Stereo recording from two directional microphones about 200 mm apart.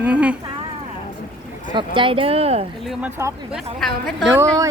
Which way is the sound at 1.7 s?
25° right (ahead or behind).